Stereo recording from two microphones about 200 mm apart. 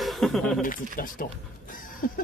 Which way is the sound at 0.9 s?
45° left (ahead or behind).